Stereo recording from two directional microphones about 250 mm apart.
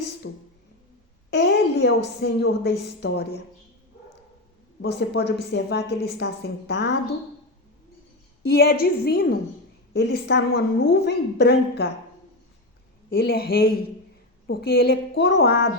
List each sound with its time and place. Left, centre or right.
0.2 s a woman's voice: left
4.8 s a woman's voice: left
8.4 s a woman's voice: left
13.1 s a woman's voice: left